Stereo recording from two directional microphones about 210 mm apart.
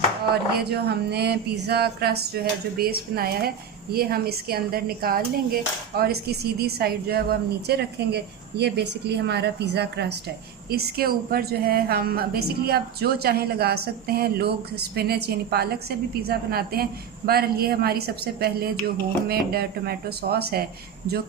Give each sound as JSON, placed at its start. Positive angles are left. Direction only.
{"t": 0.6, "sound": "a woman's voice", "side_deg": -50}